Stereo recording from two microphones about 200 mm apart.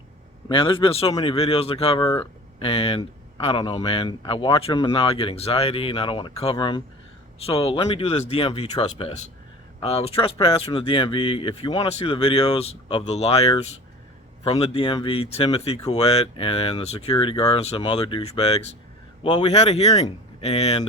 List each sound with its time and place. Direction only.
0.4 s speech: 25° left (ahead or behind)